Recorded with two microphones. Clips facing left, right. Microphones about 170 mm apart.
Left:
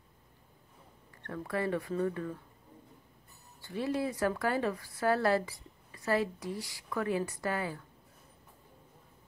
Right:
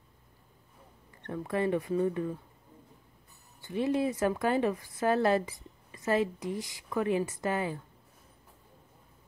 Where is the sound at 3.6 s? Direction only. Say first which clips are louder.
Right 4 dB; 20° right (ahead or behind).